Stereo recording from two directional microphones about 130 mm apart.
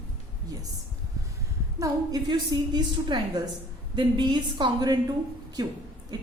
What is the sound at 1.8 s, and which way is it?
A woman's voice, 30° right (ahead or behind).